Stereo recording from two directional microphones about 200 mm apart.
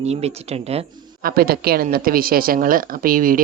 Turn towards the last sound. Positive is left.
turn(degrees=-45)  # may be behind; listen again after turning